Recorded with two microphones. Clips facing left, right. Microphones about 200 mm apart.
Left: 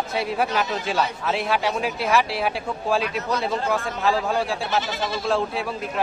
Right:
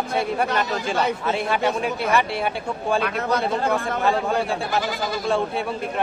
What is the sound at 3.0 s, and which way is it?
Speech, 55° right (ahead or behind).